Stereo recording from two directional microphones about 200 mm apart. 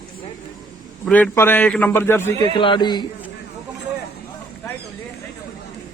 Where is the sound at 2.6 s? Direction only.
25° left (ahead or behind).